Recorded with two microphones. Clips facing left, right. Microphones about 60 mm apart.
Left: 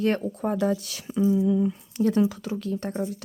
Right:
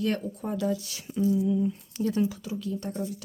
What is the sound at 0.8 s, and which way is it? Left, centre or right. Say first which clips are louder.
Speech: left 3 dB; left.